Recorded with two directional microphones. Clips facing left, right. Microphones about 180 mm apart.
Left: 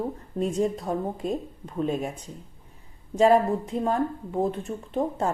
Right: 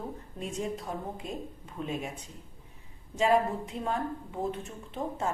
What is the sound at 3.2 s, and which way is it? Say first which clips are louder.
Speech: left 6 dB; 40° left (ahead or behind).